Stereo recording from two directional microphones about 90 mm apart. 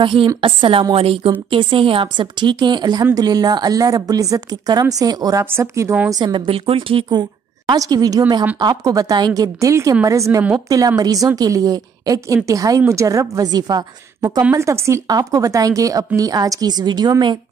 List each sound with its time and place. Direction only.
0.0 s a woman's voice: 65° right (ahead or behind)
0.4 s a woman's voice: 75° right (ahead or behind)
0.9 s speech: 90° right
1.5 s a woman's voice: 75° right (ahead or behind); by 5.4 s 45° right (ahead or behind)
5.4 s a woman's voice: 30° right (ahead or behind)
6.0 s speech: 50° right (ahead or behind); by 7.1 s 80° right
7.1 s a woman's voice: 50° right (ahead or behind)
14.5 s a woman's voice: 35° right (ahead or behind)
15.0 s a woman's voice: 45° right (ahead or behind)